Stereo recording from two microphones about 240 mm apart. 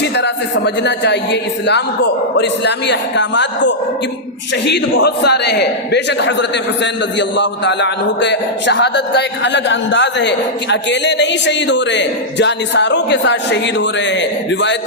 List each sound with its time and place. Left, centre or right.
0.0 s a man's voice: left